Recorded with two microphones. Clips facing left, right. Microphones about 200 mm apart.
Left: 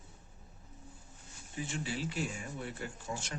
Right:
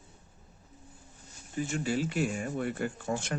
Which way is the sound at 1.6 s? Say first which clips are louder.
Right 7 dB; 45° right (ahead or behind).